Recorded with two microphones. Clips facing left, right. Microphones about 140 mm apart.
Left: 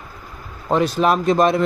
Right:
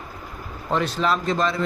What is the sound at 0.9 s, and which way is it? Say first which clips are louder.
Speech: left 5 dB; 50° left (ahead or behind).